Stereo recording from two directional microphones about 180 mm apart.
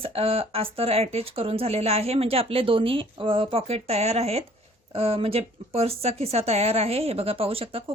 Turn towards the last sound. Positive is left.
turn(degrees=-30)  # may be behind; listen again after turning